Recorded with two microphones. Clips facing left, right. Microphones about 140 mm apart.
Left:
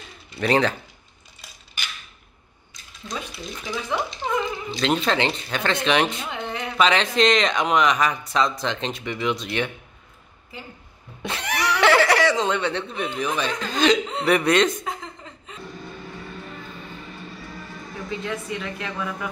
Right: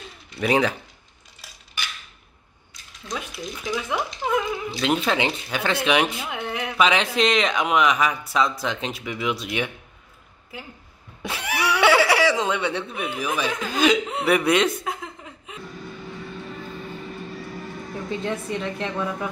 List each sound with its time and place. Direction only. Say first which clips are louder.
0.4 s speech: even; 10° right (ahead or behind)
3.1 s speech: right 1 dB; centre (ahead or behind)
11.2 s speech: even; 5° right (ahead or behind)
14.9 s chuckle: right 1 dB; 5° right (ahead or behind)
18.2 s a woman's voice: right 3 dB; 30° right (ahead or behind)